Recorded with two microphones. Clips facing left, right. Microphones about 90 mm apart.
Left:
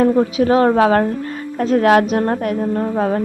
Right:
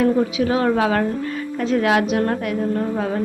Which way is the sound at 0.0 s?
40° left (ahead or behind).